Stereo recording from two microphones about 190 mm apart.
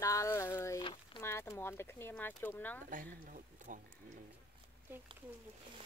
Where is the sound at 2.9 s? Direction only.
45° right (ahead or behind).